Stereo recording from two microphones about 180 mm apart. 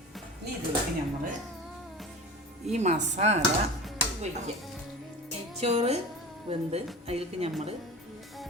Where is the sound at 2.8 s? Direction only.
40° right (ahead or behind).